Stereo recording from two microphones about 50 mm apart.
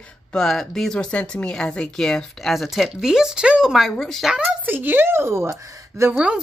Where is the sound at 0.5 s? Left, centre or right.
Centre.